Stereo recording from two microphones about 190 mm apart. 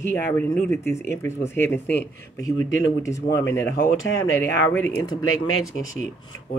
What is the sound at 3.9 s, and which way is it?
Speech, 90° left.